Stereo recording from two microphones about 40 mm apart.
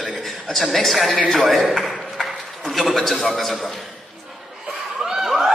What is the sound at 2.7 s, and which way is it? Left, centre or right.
A man's voice, centre.